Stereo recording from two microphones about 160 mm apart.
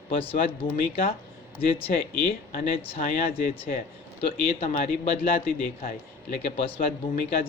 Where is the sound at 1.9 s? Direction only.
60° left (ahead or behind).